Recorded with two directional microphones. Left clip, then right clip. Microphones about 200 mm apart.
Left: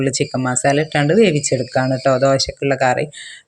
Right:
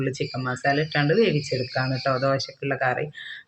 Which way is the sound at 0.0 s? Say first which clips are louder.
Left 9 dB; 45° left (ahead or behind).